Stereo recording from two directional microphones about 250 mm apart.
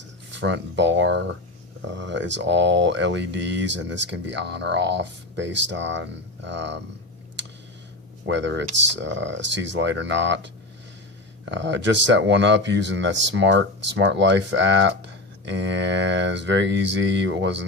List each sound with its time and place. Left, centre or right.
0.3 s speech: right
8.3 s speech: right
11.5 s speech: right